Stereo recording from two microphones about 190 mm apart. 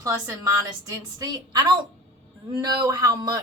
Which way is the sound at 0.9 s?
20° right (ahead or behind).